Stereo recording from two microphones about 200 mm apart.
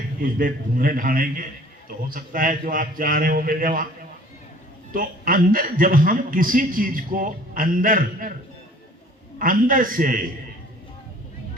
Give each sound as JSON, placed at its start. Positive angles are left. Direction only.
{"t": 0.2, "sound": "a woman's voice", "side_deg": -45}
{"t": 4.9, "sound": "a woman's voice", "side_deg": -45}
{"t": 9.4, "sound": "a woman's voice", "side_deg": -45}